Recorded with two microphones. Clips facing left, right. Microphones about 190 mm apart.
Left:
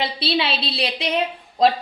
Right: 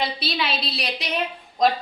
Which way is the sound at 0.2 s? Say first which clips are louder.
Left 4 dB; 30° left (ahead or behind).